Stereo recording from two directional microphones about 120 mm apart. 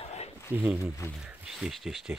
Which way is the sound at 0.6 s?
15° right (ahead or behind).